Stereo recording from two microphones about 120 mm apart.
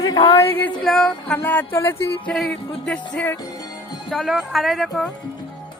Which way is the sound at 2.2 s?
5° left (ahead or behind).